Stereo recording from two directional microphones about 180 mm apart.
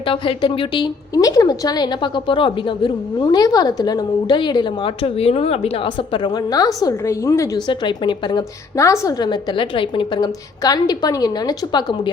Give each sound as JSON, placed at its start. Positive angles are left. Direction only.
{"t": 0.0, "sound": "a woman's voice", "side_deg": 30}